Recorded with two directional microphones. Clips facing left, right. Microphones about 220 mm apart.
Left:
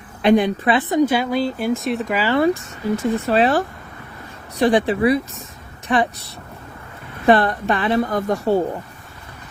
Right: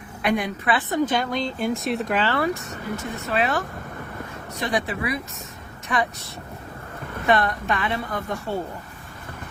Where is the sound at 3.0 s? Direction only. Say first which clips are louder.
Left 8 dB; 30° left (ahead or behind).